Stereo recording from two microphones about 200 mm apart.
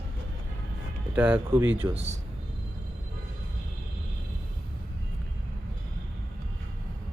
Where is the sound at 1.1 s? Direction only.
10° right (ahead or behind).